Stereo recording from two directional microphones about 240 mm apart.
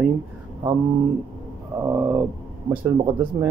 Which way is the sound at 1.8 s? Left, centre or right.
Centre.